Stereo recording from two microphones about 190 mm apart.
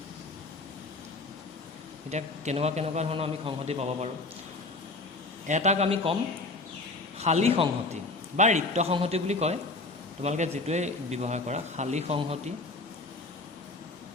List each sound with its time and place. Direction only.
2.0 s a man's voice: 35° right (ahead or behind)
5.5 s a man's voice: 40° right (ahead or behind)
7.2 s a man's voice: 35° right (ahead or behind)